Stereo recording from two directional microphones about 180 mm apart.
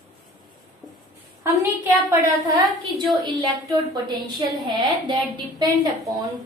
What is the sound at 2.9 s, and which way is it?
A woman's voice, 25° right (ahead or behind).